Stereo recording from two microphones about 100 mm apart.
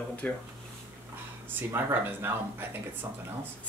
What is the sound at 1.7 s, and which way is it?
Speech, 20° right (ahead or behind).